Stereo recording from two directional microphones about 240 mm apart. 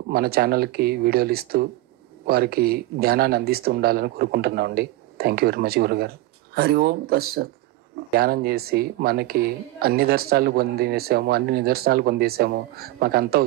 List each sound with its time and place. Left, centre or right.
0.1 s speech: right